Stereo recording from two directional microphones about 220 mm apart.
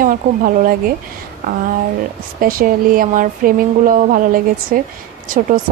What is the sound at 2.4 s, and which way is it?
A woman's voice, 40° right (ahead or behind).